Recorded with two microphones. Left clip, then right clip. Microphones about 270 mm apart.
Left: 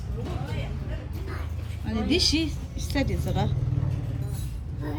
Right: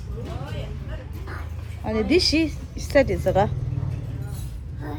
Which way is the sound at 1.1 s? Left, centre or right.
Centre.